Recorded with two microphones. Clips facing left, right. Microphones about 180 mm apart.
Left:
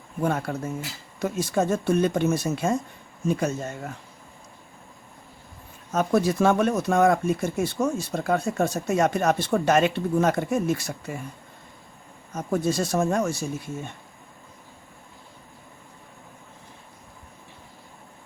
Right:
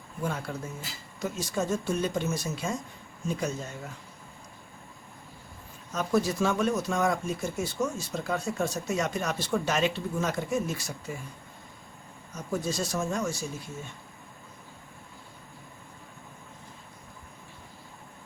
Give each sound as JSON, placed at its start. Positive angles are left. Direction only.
{"t": 0.2, "sound": "speech", "side_deg": 60}
{"t": 5.9, "sound": "speech", "side_deg": 55}
{"t": 12.5, "sound": "speech", "side_deg": 60}